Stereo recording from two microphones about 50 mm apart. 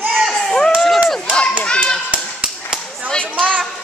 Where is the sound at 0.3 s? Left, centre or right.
Centre.